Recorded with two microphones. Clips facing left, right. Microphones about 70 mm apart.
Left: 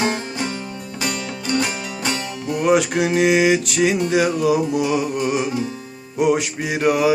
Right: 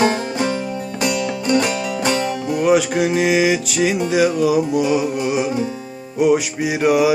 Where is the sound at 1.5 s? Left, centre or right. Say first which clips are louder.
Right 4 dB; right.